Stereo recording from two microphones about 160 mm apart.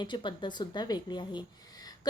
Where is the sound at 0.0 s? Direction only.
30° left (ahead or behind).